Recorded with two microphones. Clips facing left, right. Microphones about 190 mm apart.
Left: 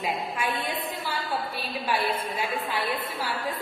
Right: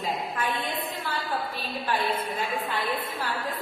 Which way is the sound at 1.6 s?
10° left (ahead or behind).